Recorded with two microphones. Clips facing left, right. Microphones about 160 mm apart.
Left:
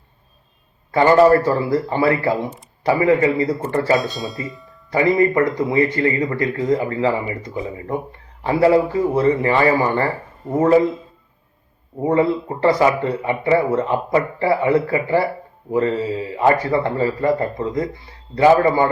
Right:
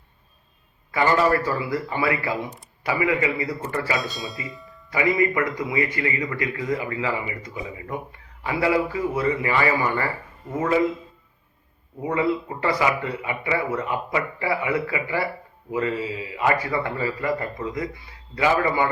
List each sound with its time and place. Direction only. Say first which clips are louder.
1.0 s a man's voice: left 8 dB; 40° left (ahead or behind)
3.9 s speech: left 8 dB; centre (ahead or behind)
4.9 s a man's voice: left 6 dB; 40° left (ahead or behind)
11.9 s a man's voice: left 6 dB; 40° left (ahead or behind)